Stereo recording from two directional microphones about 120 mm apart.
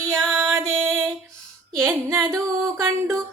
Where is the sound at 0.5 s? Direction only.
25° right (ahead or behind).